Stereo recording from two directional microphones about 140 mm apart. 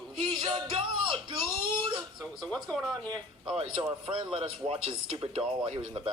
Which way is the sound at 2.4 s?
5° left (ahead or behind).